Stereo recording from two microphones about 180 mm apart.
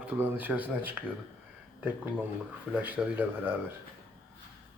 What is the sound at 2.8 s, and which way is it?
Speech, 10° right (ahead or behind).